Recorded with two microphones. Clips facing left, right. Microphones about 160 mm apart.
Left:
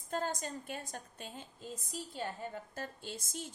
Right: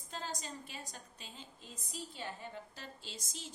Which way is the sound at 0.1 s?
50° left (ahead or behind).